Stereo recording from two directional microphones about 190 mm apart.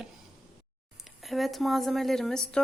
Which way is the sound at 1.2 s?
Centre (ahead or behind).